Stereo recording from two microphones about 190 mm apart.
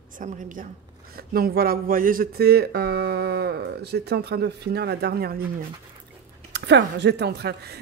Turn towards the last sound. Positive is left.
turn(degrees=-60)  # may be behind; listen again after turning